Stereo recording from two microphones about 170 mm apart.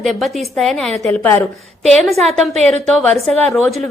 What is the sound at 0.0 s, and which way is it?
A woman's voice, centre (ahead or behind).